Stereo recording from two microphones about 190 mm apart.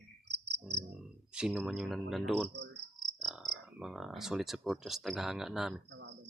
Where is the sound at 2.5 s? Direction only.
65° right (ahead or behind).